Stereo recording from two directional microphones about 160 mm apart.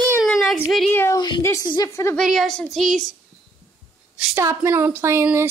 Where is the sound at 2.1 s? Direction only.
Centre (ahead or behind).